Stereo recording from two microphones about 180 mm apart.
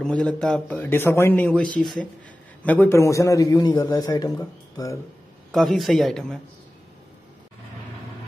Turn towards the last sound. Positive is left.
turn(degrees=5)  # may be behind; listen again after turning